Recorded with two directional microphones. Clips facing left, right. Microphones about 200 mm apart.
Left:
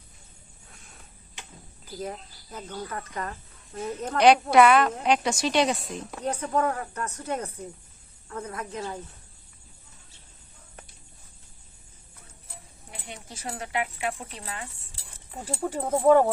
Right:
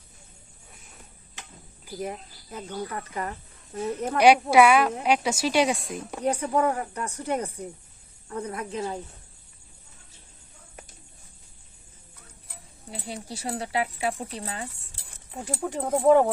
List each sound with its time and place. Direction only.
2.0 s a woman's voice: 15° right (ahead or behind)
12.9 s speech: 35° right (ahead or behind)
15.3 s speech: 5° left (ahead or behind)